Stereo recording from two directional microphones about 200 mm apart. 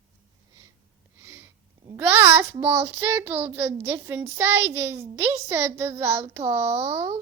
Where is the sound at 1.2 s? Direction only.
10° right (ahead or behind).